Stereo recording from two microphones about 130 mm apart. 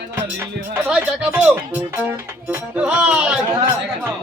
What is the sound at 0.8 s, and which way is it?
Speech, 10° right (ahead or behind).